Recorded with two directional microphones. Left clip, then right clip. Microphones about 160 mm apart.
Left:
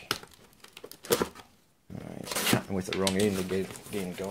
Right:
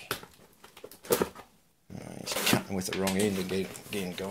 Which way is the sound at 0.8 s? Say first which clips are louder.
Even; 25° left (ahead or behind).